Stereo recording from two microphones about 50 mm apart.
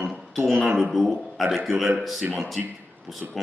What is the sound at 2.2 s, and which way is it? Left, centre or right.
Speech, right.